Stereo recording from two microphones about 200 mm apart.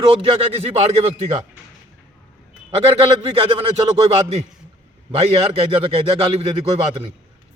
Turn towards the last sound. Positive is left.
turn(degrees=-25)  # may be behind; listen again after turning